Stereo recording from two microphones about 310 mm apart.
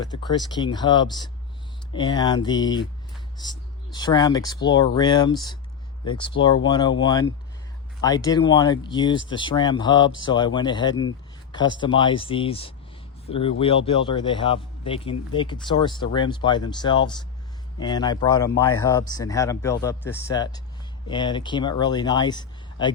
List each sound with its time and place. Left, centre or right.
0.0 s speech: centre